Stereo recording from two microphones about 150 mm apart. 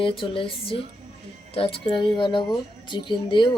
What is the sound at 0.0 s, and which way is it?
Speech, 35° left (ahead or behind).